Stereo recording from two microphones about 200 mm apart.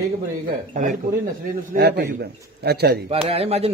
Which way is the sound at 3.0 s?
30° right (ahead or behind).